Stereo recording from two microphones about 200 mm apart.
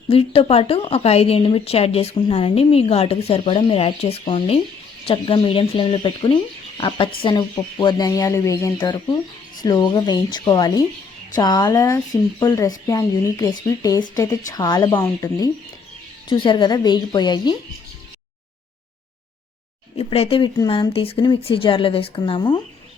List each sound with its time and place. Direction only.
0.1 s speech: 30° left (ahead or behind)
20.0 s speech: 30° left (ahead or behind)